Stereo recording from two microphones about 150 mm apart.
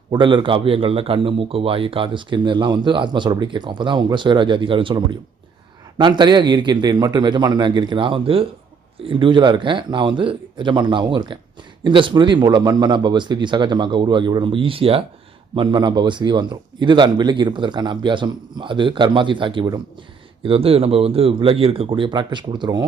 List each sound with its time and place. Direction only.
0.1 s a man's voice: 35° right (ahead or behind)